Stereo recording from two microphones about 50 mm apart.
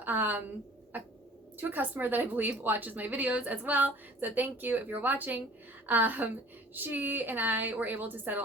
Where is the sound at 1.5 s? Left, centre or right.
Right.